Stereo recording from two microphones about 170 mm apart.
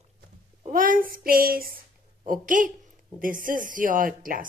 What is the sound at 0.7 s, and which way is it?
A woman's voice, 55° right (ahead or behind).